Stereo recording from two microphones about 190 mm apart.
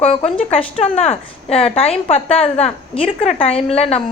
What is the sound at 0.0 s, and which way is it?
Speech, 30° left (ahead or behind).